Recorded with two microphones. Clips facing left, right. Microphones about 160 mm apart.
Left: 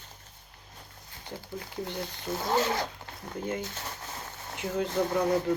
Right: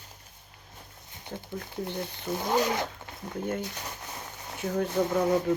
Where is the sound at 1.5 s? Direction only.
15° left (ahead or behind).